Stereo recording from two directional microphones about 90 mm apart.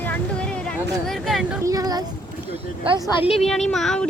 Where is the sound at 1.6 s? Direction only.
40° right (ahead or behind).